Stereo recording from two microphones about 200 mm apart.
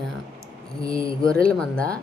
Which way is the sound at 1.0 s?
25° left (ahead or behind).